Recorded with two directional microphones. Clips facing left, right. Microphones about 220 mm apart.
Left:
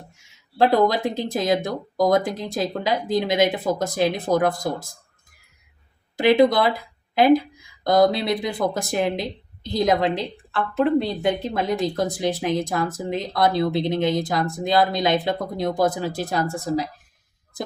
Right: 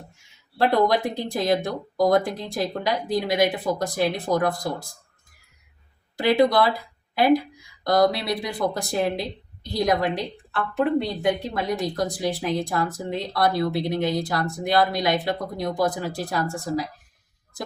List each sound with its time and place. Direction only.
0.6 s speech: 20° left (ahead or behind)
6.1 s speech: 20° left (ahead or behind)